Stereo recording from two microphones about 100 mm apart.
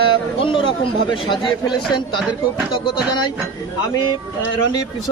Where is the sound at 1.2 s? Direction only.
55° left (ahead or behind).